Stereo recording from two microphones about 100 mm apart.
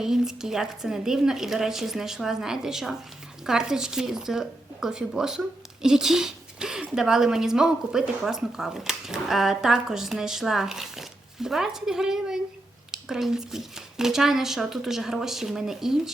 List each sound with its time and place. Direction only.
0.0 s speech: 5° right (ahead or behind)